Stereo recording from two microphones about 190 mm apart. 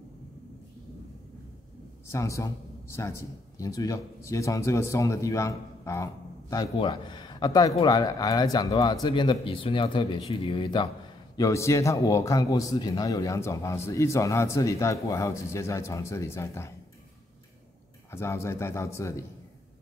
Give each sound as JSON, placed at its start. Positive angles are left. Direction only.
{"t": 2.0, "sound": "a man's voice", "side_deg": 15}
{"t": 18.1, "sound": "a man's voice", "side_deg": 15}